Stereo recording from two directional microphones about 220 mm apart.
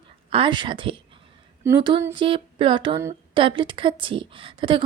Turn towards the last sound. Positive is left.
turn(degrees=-20)  # may be behind; listen again after turning